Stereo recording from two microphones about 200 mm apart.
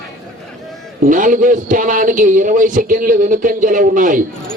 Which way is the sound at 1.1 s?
40° right (ahead or behind).